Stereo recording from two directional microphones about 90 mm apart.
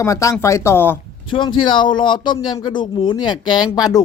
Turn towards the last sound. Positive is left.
turn(degrees=50)  # may be behind; listen again after turning